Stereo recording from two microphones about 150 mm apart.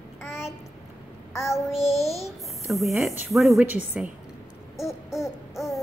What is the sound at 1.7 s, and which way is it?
Child singing, 45° left (ahead or behind).